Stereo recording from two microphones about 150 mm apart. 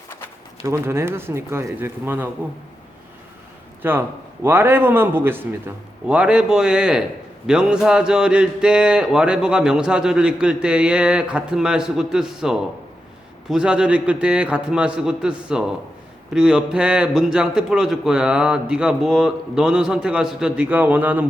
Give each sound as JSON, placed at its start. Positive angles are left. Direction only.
{"t": 0.6, "sound": "a man's voice", "side_deg": -15}
{"t": 3.8, "sound": "a man's voice", "side_deg": -15}